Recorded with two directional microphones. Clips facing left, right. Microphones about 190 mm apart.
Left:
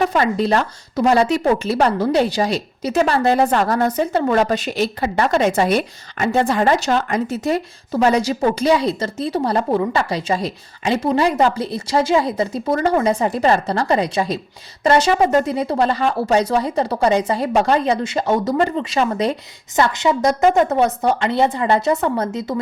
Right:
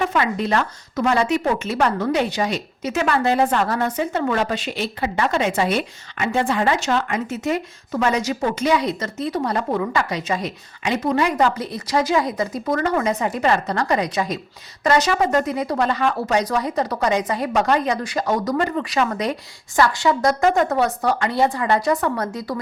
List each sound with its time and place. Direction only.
0.0 s speech: 35° left (ahead or behind)